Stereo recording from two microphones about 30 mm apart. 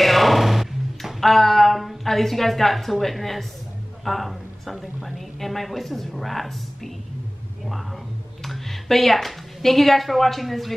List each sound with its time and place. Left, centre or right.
0.0 s a sound: centre
1.2 s a woman's voice: centre
8.5 s a woman's voice: centre